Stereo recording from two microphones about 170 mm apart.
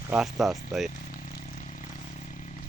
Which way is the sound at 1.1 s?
50° left (ahead or behind).